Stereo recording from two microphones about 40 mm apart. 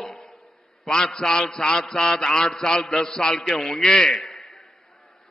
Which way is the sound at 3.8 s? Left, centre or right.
Centre.